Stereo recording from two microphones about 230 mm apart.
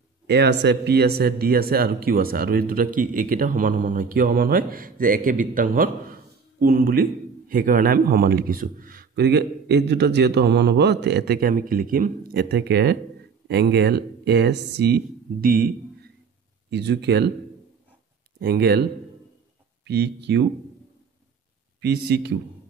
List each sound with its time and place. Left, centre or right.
0.3 s a man's voice: right
18.4 s a man's voice: right
21.8 s a man's voice: right